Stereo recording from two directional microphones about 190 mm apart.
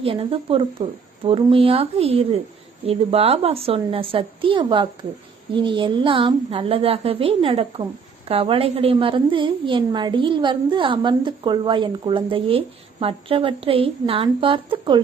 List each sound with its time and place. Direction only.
0.0 s a woman's voice: 30° right (ahead or behind)